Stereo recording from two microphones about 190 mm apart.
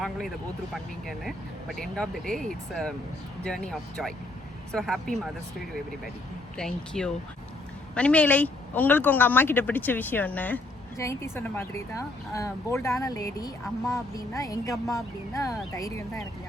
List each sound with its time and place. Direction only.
0.7 s speech: centre (ahead or behind)
6.6 s speech: 5° left (ahead or behind)